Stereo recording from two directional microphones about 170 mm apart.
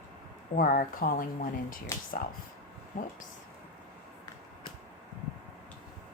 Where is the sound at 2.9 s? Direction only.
50° left (ahead or behind).